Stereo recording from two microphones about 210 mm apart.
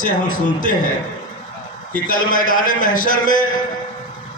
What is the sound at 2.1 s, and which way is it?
A man's voice, 40° left (ahead or behind).